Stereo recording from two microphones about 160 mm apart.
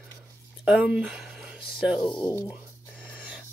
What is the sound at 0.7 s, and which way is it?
Speech, 5° right (ahead or behind).